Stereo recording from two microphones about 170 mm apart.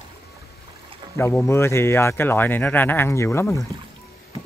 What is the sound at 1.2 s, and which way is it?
Speech, 15° left (ahead or behind).